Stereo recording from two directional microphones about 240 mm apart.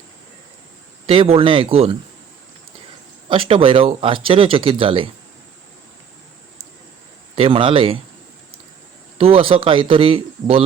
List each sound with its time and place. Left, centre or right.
1.0 s speech: right
3.2 s speech: right
7.3 s speech: right
9.1 s speech: right